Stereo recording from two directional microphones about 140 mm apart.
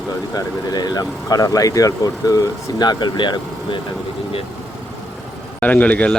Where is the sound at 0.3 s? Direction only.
30° left (ahead or behind).